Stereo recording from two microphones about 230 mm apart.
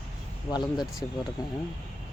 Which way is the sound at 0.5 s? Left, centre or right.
Centre.